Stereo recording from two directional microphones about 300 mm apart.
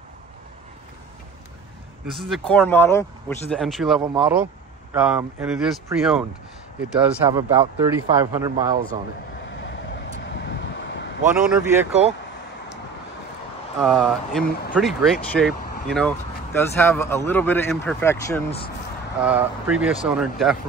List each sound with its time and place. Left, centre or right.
2.2 s speech: centre
9.5 s vehicle: left
11.3 s speech: centre
13.7 s speech: centre